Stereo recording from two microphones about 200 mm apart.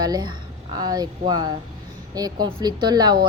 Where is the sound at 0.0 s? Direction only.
20° right (ahead or behind).